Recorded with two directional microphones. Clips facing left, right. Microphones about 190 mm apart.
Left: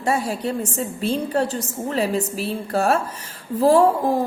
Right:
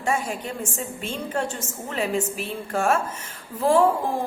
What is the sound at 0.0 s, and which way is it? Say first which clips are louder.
A woman's voice: left 4 dB; 35° left (ahead or behind).